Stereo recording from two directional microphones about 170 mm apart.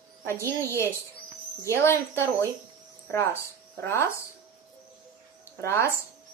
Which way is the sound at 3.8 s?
15° left (ahead or behind).